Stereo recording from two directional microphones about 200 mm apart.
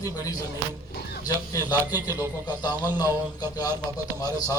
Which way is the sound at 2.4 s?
20° left (ahead or behind).